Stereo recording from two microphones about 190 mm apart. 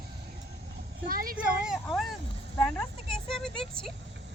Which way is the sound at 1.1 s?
50° right (ahead or behind).